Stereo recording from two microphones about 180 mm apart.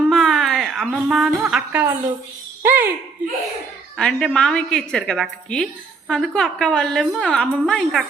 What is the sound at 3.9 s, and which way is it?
A woman's voice, 5° left (ahead or behind).